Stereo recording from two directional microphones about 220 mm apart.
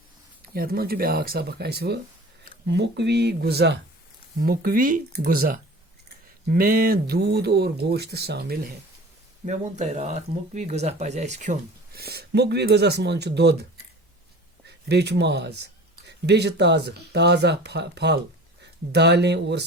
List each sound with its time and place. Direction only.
0.5 s speech: 45° right (ahead or behind)
9.5 s speech: 30° right (ahead or behind)
11.9 s speech: 45° right (ahead or behind)
14.8 s speech: 50° right (ahead or behind)